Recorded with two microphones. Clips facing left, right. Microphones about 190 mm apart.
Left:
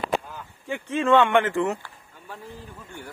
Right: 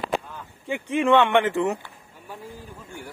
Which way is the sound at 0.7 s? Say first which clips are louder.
Right 1 dB; 15° right (ahead or behind).